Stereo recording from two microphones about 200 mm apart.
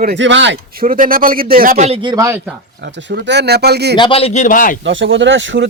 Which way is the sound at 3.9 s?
25° left (ahead or behind).